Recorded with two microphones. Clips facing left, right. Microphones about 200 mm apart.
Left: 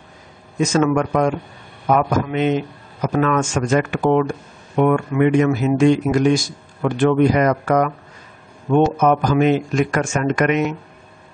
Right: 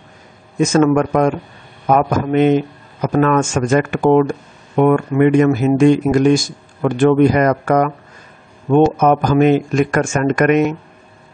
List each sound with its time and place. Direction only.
0.6 s speech: 50° right (ahead or behind)